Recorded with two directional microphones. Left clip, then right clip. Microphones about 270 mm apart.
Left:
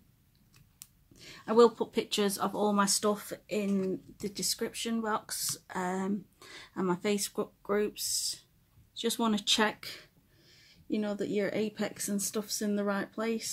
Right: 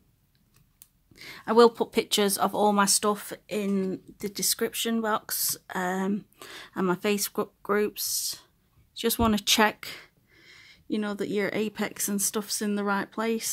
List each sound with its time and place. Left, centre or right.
1.1 s speech: right